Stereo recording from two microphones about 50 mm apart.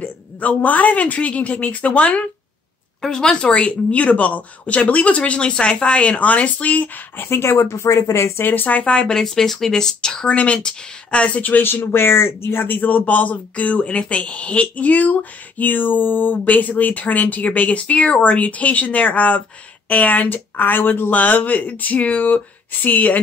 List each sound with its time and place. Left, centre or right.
0.0 s speech: left
3.0 s speech: centre; by 6.9 s left
7.2 s speech: left
7.4 s speech: left
8.4 s speech: left; by 10.2 s centre
10.2 s speech: left
11.7 s speech: left